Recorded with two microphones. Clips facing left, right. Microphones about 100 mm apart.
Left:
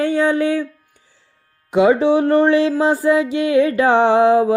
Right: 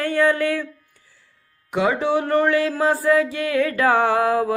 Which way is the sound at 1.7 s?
20° left (ahead or behind).